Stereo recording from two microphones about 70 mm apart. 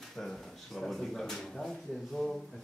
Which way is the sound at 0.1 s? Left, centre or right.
Centre.